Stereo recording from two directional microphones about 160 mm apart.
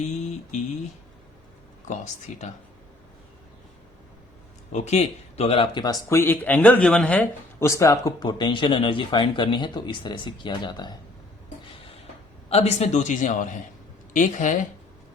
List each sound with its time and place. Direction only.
4.7 s speech: 45° left (ahead or behind); by 10.9 s 30° left (ahead or behind)
12.5 s a man's voice: 40° left (ahead or behind)